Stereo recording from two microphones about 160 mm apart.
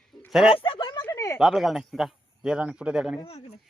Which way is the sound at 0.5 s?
30° left (ahead or behind).